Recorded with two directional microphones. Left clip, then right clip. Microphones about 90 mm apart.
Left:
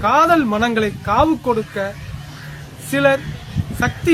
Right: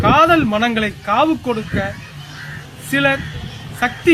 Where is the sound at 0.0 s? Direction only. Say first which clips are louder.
Right 2 dB; 40° left (ahead or behind).